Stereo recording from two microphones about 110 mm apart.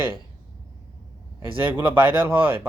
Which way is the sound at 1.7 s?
20° right (ahead or behind).